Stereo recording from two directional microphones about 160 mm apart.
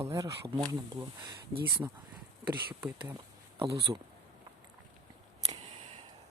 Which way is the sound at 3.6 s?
20° right (ahead or behind).